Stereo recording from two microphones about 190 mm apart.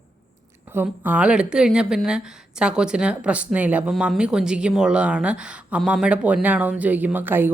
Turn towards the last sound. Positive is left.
turn(degrees=-10)  # may be behind; listen again after turning